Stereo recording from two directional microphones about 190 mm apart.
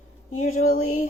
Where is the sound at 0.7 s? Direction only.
40° left (ahead or behind).